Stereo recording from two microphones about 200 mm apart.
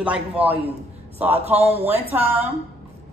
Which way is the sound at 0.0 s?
5° right (ahead or behind).